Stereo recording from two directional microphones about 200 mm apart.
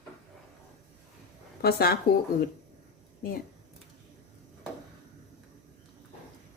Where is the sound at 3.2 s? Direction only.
45° left (ahead or behind).